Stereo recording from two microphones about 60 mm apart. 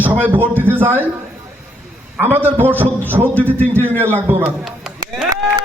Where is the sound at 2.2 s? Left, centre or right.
Right.